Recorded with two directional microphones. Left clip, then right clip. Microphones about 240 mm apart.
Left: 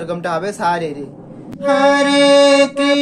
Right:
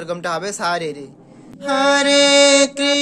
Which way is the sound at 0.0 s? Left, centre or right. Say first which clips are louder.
Left 3 dB; right.